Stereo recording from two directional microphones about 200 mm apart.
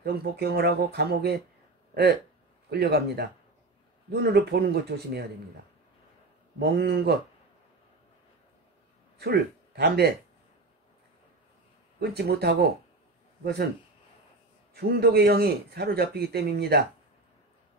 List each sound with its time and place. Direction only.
0.0 s speech: 50° right (ahead or behind)
2.7 s speech: 55° right (ahead or behind)
6.6 s speech: 55° right (ahead or behind)
9.2 s a man's voice: 55° right (ahead or behind)
12.0 s speech: 50° right (ahead or behind)
14.7 s speech: 50° right (ahead or behind)